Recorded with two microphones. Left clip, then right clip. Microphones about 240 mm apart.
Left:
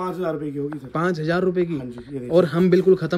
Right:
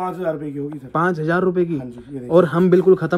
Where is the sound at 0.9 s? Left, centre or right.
Centre.